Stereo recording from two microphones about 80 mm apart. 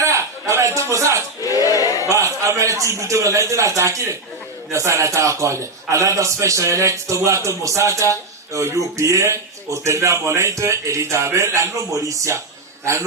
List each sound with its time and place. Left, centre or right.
0.0 s a sound: right
1.4 s crowd: left
2.0 s a man's voice: right